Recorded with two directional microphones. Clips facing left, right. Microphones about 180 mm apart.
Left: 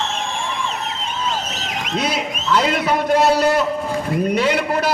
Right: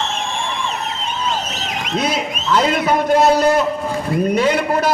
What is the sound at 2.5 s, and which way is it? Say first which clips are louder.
A man's voice: right 2 dB; 45° right (ahead or behind).